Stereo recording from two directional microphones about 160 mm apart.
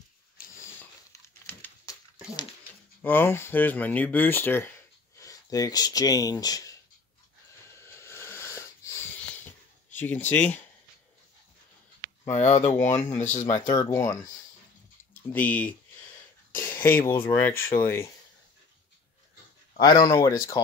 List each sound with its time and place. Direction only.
0.6 s a sound: 15° left (ahead or behind)
3.0 s speech: 15° left (ahead or behind)
7.8 s wheeze: 15° left (ahead or behind)
9.9 s speech: 10° left (ahead or behind)
12.5 s speech: 45° left (ahead or behind)
13.7 s speech: 25° left (ahead or behind); by 15.7 s 10° left (ahead or behind)
16.6 s a sound: 15° left (ahead or behind)
17.1 s speech: 15° left (ahead or behind)
19.8 s speech: 25° left (ahead or behind)